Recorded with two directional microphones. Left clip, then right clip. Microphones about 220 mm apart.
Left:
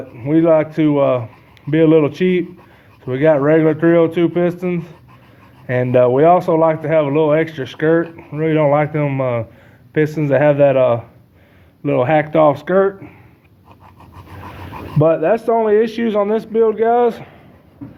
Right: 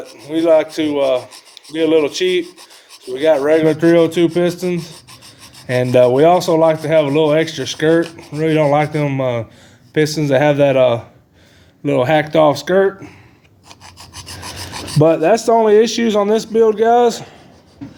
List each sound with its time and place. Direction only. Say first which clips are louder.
0.2 s a man's voice: even; 25° right (ahead or behind)
14.9 s a man's voice: right 2 dB; 45° right (ahead or behind)